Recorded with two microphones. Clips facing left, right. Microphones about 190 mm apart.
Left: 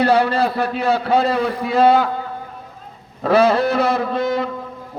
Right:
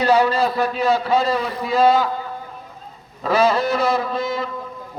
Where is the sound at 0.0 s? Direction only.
60° left (ahead or behind).